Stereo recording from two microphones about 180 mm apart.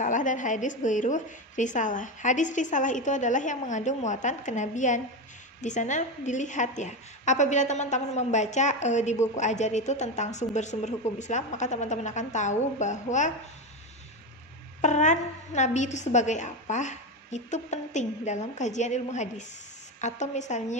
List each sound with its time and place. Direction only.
0.0 s a woman's voice: 45° left (ahead or behind)
14.8 s a woman's voice: 40° left (ahead or behind)